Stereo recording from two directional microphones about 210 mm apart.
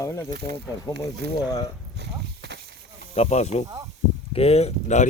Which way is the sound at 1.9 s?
55° right (ahead or behind).